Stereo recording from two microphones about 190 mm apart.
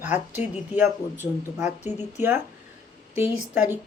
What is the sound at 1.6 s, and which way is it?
Speech, 40° left (ahead or behind).